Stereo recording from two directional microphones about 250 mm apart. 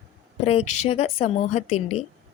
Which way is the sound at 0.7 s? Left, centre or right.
Left.